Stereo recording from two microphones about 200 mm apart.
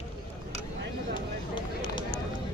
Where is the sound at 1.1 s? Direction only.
25° left (ahead or behind).